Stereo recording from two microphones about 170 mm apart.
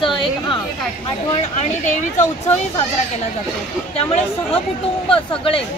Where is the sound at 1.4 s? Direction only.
40° left (ahead or behind).